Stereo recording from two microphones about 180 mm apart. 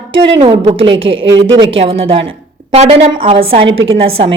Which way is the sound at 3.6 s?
90° right.